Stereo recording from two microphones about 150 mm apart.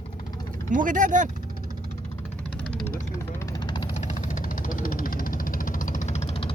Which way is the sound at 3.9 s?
50° left (ahead or behind).